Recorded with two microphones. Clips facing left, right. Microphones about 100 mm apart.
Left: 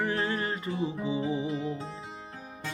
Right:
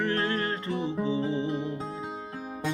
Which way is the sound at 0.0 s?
10° left (ahead or behind).